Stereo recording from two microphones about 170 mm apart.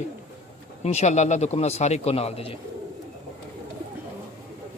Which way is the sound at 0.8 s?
40° left (ahead or behind).